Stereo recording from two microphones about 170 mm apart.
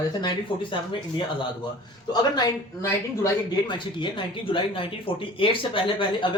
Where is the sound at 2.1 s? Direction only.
25° left (ahead or behind).